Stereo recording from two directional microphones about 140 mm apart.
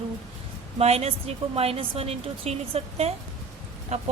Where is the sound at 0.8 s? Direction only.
50° right (ahead or behind).